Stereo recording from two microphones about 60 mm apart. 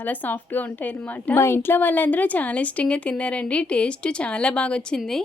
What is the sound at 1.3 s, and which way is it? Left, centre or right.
A woman's voice, left.